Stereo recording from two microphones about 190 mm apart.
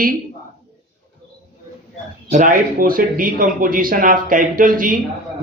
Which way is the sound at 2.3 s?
45° right (ahead or behind).